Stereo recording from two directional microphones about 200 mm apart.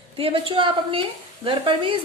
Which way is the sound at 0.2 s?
25° right (ahead or behind).